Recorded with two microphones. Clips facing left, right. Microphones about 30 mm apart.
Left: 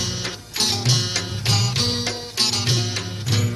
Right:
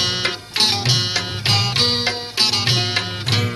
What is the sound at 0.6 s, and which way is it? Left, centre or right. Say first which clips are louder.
Music: right 2 dB; right.